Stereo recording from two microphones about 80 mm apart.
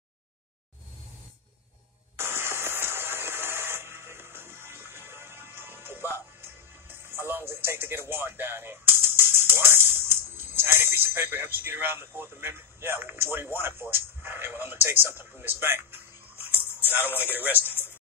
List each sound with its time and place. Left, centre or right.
2.1 s a sound: right
6.1 s speech: right
17.2 s a man's voice: right